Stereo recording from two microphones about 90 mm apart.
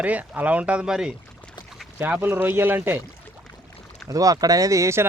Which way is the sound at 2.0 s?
20° right (ahead or behind).